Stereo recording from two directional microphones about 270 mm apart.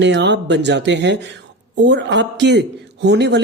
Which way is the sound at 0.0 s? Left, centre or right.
Right.